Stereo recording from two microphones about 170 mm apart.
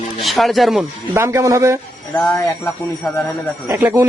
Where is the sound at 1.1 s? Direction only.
15° right (ahead or behind).